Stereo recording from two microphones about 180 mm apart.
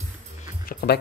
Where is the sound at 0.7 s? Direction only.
55° left (ahead or behind).